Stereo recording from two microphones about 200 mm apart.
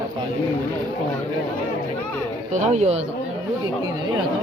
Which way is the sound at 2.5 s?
35° right (ahead or behind).